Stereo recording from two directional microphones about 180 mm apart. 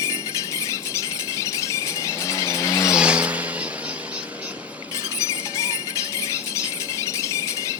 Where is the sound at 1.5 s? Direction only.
15° left (ahead or behind).